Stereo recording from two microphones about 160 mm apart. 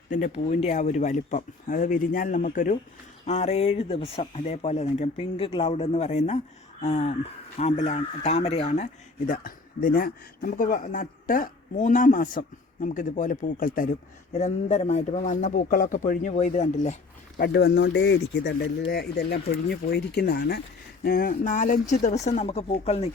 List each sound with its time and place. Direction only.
0.3 s speech: 45° left (ahead or behind)
3.2 s speech: 45° left (ahead or behind)
14.3 s speech: 45° left (ahead or behind)
17.4 s speech: 90° left
21.0 s speech: 65° left (ahead or behind); by 23.0 s 40° left (ahead or behind)